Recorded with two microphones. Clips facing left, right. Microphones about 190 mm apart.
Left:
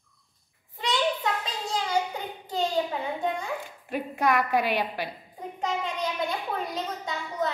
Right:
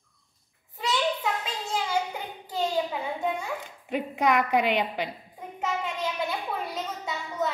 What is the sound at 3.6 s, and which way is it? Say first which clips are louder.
A woman's voice: right 2 dB; 20° right (ahead or behind).